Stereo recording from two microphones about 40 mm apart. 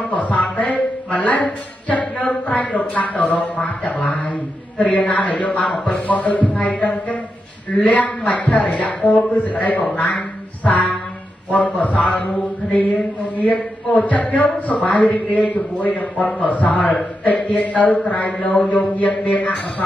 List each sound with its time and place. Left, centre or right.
0.0 s a man's voice: left
9.9 s quack: left
11.5 s a man's voice: left